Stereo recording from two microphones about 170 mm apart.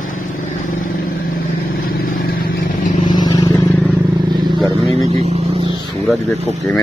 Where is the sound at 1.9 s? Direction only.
60° left (ahead or behind).